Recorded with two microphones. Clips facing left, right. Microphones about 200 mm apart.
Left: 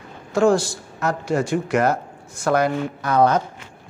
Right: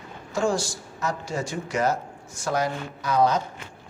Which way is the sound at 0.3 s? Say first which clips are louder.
Left 8 dB; 60° left (ahead or behind).